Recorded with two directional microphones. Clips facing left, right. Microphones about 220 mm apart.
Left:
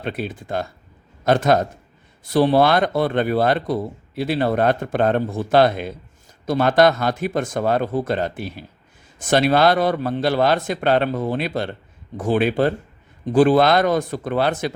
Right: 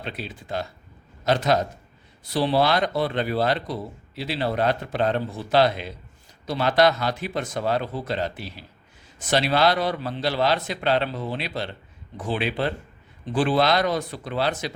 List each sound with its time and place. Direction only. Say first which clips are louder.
0.0 s speech: left 7 dB; 50° left (ahead or behind)